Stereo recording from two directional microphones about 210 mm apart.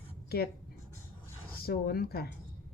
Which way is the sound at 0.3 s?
50° left (ahead or behind).